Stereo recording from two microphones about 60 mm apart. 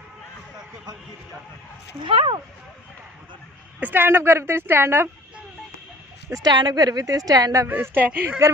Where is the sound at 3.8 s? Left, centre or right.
Right.